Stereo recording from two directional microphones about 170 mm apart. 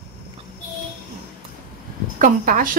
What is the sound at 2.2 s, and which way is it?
Speech, 50° right (ahead or behind).